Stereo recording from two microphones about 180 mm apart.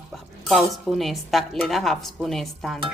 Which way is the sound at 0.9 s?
Centre (ahead or behind).